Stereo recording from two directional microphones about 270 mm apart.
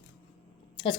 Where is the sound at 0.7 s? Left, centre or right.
Centre.